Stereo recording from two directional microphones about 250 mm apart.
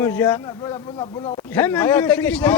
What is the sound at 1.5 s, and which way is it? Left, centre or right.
Speech, centre.